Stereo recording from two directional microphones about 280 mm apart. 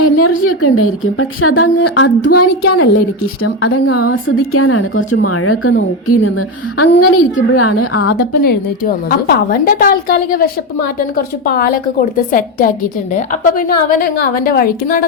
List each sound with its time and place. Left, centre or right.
0.0 s a woman's voice: left
2.6 s a woman's voice: left
8.1 s a woman's voice: left